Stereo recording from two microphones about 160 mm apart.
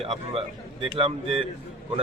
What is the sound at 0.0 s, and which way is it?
A man's voice, 35° right (ahead or behind).